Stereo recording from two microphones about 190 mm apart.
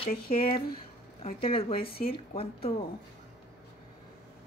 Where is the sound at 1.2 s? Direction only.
30° left (ahead or behind).